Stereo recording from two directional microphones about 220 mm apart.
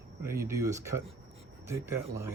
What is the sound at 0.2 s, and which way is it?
Speech, 10° right (ahead or behind).